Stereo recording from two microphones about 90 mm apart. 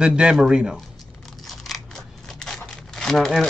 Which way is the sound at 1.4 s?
Centre (ahead or behind).